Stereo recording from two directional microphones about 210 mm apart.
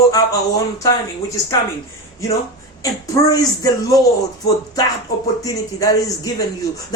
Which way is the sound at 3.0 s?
15° left (ahead or behind).